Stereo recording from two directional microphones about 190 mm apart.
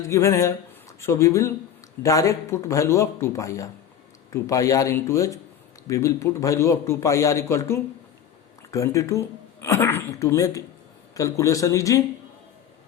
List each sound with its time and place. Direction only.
0.1 s speech: 15° left (ahead or behind)